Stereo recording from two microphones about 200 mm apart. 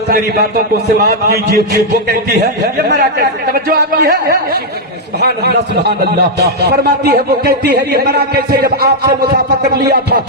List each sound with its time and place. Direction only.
1.0 s a man's voice: 55° right (ahead or behind)
5.2 s speech: 55° right (ahead or behind)